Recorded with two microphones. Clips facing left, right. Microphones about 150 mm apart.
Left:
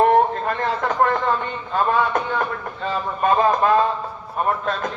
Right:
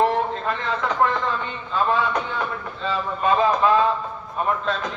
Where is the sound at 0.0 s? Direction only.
50° left (ahead or behind).